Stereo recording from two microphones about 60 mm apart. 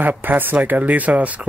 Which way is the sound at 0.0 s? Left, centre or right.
Right.